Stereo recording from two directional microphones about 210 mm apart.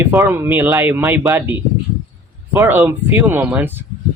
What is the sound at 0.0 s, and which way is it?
Speech, 15° right (ahead or behind).